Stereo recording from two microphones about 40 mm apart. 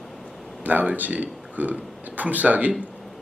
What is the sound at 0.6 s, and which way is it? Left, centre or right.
A man's voice, right.